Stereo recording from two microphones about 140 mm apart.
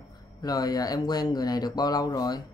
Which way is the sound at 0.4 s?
30° left (ahead or behind).